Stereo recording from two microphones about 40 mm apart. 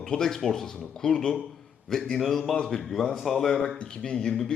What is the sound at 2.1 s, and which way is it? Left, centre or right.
Speech, centre.